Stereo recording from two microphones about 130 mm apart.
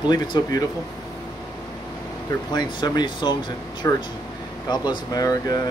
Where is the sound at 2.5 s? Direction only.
35° left (ahead or behind).